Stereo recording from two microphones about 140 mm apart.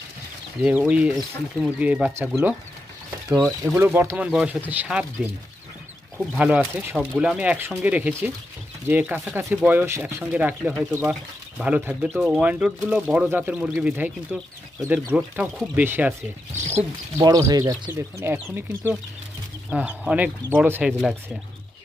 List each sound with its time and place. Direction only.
0.6 s speech: 10° right (ahead or behind)
3.6 s speech: 15° right (ahead or behind)
4.3 s speech: 5° right (ahead or behind)
17.2 s speech: 30° right (ahead or behind)
17.9 s speech: 15° right (ahead or behind)